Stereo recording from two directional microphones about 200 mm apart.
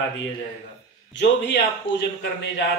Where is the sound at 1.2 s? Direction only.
60° left (ahead or behind).